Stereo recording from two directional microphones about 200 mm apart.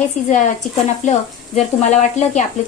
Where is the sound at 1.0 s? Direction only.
35° left (ahead or behind).